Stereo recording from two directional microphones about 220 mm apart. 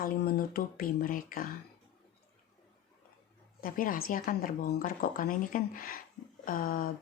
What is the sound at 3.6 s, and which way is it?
A woman's voice, 40° left (ahead or behind).